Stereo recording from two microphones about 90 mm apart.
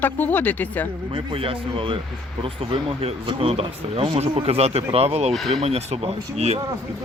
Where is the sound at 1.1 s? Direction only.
90° right.